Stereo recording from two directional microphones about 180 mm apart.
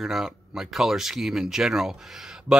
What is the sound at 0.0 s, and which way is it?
Speech, centre (ahead or behind).